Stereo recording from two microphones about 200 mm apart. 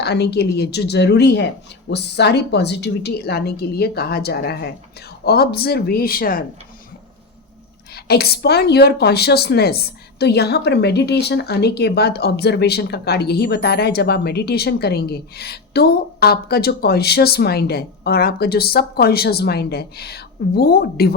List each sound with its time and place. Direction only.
0.0 s a woman's voice: 55° left (ahead or behind)
7.9 s a woman's voice: 50° left (ahead or behind)